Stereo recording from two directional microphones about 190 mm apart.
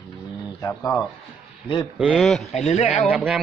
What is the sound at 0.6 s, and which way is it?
Speech, 15° left (ahead or behind).